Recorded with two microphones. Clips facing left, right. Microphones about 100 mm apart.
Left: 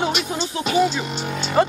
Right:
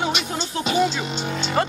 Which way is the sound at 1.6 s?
10° left (ahead or behind).